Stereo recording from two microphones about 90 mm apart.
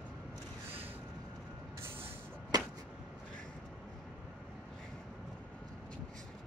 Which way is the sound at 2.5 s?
45° right (ahead or behind).